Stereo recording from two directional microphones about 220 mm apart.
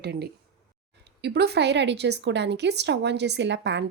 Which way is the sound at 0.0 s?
50° right (ahead or behind).